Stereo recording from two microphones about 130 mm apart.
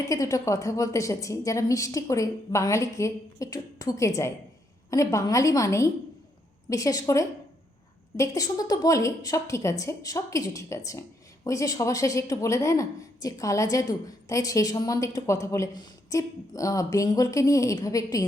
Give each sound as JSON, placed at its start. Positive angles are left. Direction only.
{"t": 0.0, "sound": "a woman's voice", "side_deg": 25}
{"t": 8.1, "sound": "a woman's voice", "side_deg": 25}